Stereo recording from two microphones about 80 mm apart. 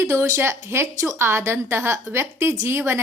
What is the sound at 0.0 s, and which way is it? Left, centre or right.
A woman's voice, right.